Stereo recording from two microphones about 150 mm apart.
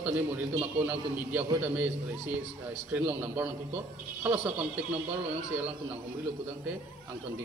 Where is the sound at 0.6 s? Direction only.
10° right (ahead or behind).